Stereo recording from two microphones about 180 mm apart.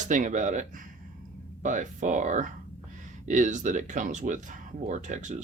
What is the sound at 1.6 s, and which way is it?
Speech, 45° right (ahead or behind).